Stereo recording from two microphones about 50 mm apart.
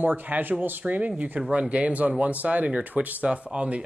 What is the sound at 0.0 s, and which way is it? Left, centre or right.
Speech, right.